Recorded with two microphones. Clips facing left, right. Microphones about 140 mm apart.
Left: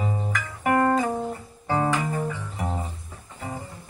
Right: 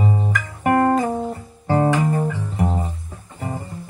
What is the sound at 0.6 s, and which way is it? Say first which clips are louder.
Guitar: right 4 dB; 40° right (ahead or behind).